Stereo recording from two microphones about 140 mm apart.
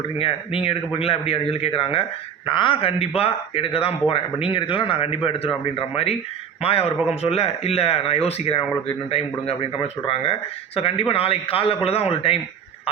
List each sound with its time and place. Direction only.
0.2 s speech: 40° left (ahead or behind)